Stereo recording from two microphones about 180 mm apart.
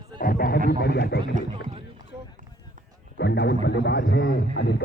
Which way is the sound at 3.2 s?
70° left (ahead or behind).